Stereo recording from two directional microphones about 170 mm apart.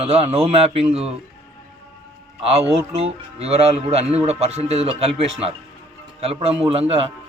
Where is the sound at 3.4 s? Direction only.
35° right (ahead or behind).